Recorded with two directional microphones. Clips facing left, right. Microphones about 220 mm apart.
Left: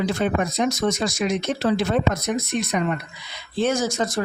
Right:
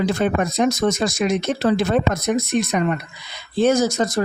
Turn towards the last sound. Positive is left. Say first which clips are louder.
# right 4 dB
turn(degrees=-40)  # may be behind; listen again after turning